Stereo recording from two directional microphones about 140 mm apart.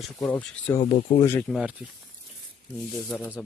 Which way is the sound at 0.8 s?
50° left (ahead or behind).